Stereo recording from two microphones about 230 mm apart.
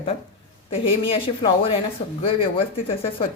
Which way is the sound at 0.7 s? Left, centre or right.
Left.